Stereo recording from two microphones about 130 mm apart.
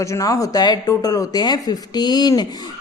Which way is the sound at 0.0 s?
25° left (ahead or behind).